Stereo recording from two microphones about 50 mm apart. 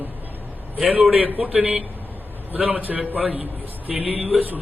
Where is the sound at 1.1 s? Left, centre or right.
Right.